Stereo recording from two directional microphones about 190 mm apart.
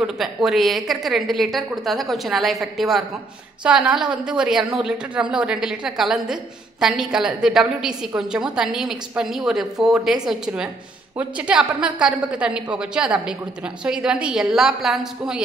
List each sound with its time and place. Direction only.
0.0 s a woman's voice: centre (ahead or behind)